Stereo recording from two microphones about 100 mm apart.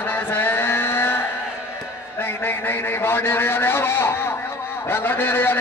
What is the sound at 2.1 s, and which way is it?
A man's voice, 20° left (ahead or behind).